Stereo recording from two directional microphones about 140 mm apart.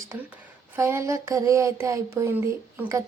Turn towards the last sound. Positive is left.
turn(degrees=-20)  # may be behind; listen again after turning